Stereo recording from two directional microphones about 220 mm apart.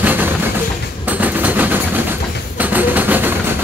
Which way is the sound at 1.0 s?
5° right (ahead or behind).